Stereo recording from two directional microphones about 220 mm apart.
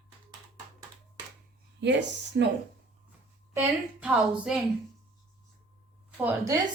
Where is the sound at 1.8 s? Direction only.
50° right (ahead or behind).